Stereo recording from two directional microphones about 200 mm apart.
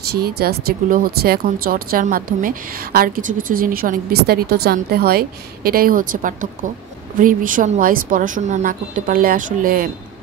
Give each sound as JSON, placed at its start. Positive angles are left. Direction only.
{"t": 0.1, "sound": "speech", "side_deg": -50}